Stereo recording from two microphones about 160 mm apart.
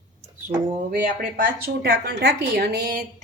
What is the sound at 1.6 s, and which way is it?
A woman's voice, 80° right.